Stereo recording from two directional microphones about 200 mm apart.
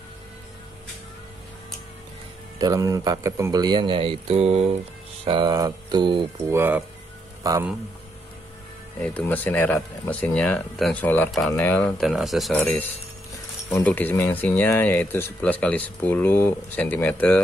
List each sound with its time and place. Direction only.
2.6 s speech: 15° right (ahead or behind)
6.5 s speech: 10° right (ahead or behind)
9.0 s speech: 5° left (ahead or behind)